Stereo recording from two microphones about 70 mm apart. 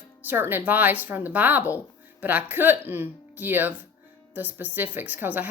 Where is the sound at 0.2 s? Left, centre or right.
Right.